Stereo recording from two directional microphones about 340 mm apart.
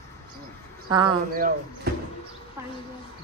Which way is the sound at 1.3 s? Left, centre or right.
Right.